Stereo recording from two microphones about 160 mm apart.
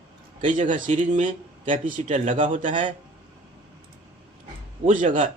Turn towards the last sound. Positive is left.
turn(degrees=-55)  # may be behind; listen again after turning